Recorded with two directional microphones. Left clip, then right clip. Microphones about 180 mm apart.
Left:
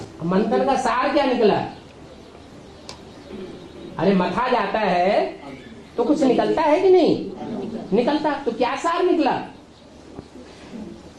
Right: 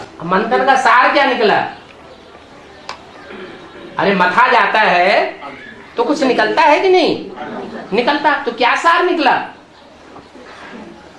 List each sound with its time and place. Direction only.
0.3 s a woman's voice: 25° right (ahead or behind)
3.9 s a woman's voice: 25° right (ahead or behind)